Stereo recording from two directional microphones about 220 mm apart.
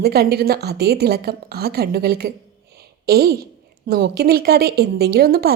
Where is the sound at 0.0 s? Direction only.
45° right (ahead or behind).